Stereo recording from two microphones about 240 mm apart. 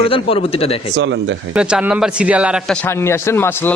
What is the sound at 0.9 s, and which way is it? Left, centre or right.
Speech, right.